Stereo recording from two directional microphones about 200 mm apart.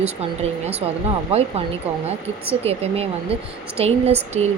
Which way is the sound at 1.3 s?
30° right (ahead or behind).